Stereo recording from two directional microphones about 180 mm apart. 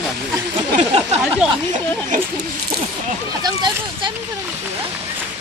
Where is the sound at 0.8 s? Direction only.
35° right (ahead or behind).